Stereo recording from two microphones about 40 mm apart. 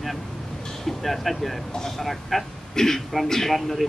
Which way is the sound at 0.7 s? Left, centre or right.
Centre.